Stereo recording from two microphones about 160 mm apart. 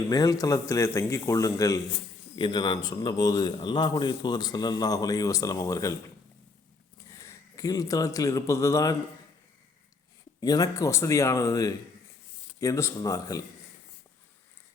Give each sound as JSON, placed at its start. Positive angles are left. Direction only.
{"t": 0.1, "sound": "a man's voice", "side_deg": 20}
{"t": 7.1, "sound": "speech", "side_deg": 20}
{"t": 10.4, "sound": "a man's voice", "side_deg": 25}